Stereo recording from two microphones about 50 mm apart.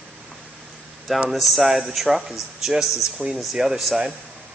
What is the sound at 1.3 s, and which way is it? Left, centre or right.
A man's voice, centre.